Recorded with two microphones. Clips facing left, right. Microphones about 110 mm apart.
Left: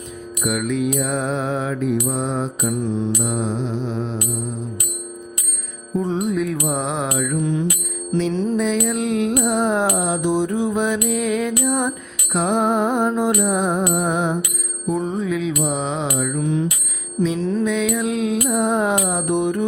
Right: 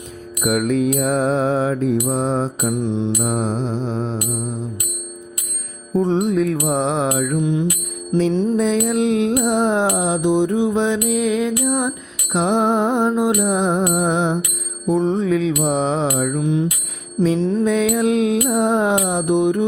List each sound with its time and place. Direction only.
0.4 s mantra: 45° right (ahead or behind)
2.6 s music: 20° right (ahead or behind)
3.2 s mantra: 40° right (ahead or behind)
5.9 s music: 30° right (ahead or behind)
6.2 s mantra: 35° right (ahead or behind)
7.3 s music: 15° right (ahead or behind)
8.5 s music: 35° right (ahead or behind); by 11.9 s 15° right (ahead or behind)
12.3 s music: 25° right (ahead or behind)
14.8 s mantra: 30° right (ahead or behind)
16.4 s music: 15° right (ahead or behind)
17.7 s mantra: 35° right (ahead or behind)
18.5 s music: 30° right (ahead or behind)